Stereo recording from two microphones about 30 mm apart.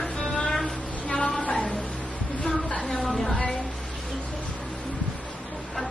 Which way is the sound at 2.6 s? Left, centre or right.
Left.